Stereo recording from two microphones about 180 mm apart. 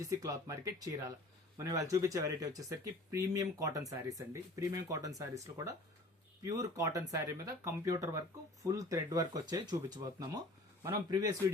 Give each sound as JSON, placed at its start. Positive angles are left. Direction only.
{"t": 0.0, "sound": "speech", "side_deg": -20}